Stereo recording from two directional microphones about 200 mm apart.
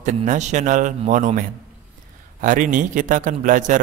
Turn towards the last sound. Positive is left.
turn(degrees=-40)  # may be behind; listen again after turning